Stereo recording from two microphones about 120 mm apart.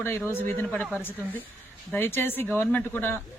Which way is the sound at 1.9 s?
20° left (ahead or behind).